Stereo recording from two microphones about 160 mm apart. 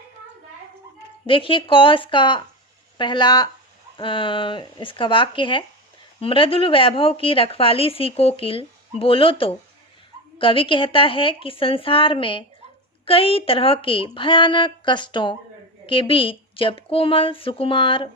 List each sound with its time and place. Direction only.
1.3 s a woman's voice: 30° left (ahead or behind)